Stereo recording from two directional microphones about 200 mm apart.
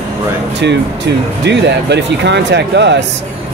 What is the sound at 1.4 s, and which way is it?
Speech, 60° right (ahead or behind).